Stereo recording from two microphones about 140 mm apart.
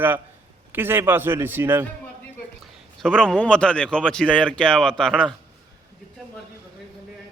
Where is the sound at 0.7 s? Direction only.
15° right (ahead or behind).